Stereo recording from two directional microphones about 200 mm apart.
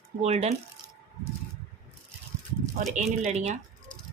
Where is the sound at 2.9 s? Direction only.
35° right (ahead or behind).